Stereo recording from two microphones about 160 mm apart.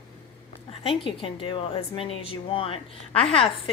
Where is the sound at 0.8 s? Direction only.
35° left (ahead or behind).